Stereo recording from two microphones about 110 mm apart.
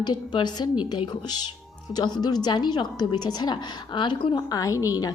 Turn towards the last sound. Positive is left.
turn(degrees=35)  # may be behind; listen again after turning